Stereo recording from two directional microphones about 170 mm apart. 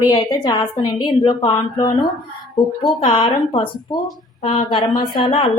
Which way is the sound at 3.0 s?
35° left (ahead or behind).